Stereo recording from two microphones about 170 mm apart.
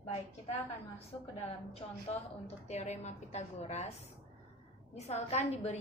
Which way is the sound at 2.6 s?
40° left (ahead or behind).